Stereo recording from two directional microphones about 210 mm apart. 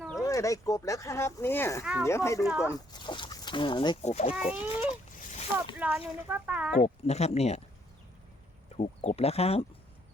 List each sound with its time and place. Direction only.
0.2 s speech: 15° left (ahead or behind)
1.8 s speech: 5° right (ahead or behind)
2.0 s speech: 15° left (ahead or behind)
2.4 s speech: 5° right (ahead or behind)
2.6 s speech: 20° left (ahead or behind)
4.4 s splash: 30° left (ahead or behind)
5.8 s speech: 5° right (ahead or behind)
6.8 s speech: 30° left (ahead or behind)
8.7 s speech: 30° left (ahead or behind)